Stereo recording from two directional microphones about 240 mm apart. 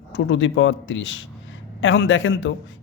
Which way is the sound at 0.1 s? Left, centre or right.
Left.